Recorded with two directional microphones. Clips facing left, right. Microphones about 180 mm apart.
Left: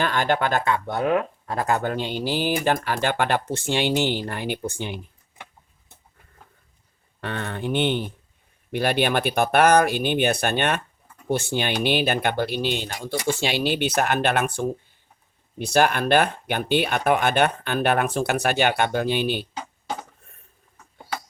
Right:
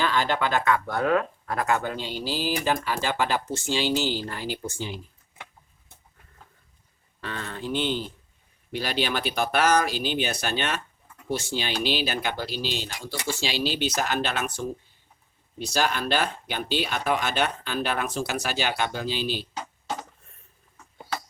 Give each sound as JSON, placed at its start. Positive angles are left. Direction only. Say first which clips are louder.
{"t": 0.0, "sound": "speech", "louder": "left 2 dB", "side_deg": 55}
{"t": 0.6, "sound": "speech", "louder": "left 1 dB", "side_deg": 25}
{"t": 1.8, "sound": "speech", "louder": "left 5 dB", "side_deg": 55}
{"t": 7.2, "sound": "speech", "louder": "left 5 dB", "side_deg": 60}